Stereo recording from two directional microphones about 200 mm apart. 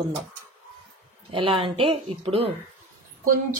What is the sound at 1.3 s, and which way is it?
Speech, 25° right (ahead or behind).